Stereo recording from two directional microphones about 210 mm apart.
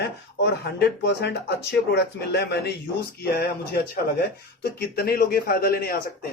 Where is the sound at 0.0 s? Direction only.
50° left (ahead or behind).